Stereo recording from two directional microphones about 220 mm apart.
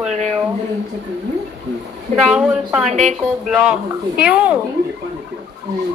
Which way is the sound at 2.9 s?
30° right (ahead or behind).